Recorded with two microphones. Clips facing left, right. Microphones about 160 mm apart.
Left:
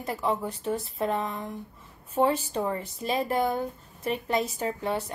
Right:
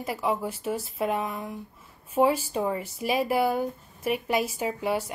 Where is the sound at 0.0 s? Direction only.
5° right (ahead or behind).